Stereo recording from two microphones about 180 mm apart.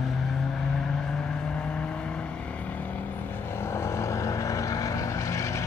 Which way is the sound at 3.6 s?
15° left (ahead or behind).